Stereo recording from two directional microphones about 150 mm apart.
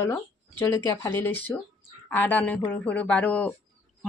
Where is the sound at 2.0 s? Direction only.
10° left (ahead or behind).